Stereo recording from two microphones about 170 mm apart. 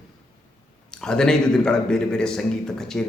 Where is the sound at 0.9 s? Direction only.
5° left (ahead or behind).